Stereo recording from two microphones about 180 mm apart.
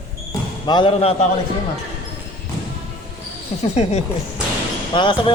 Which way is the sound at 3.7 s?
35° left (ahead or behind).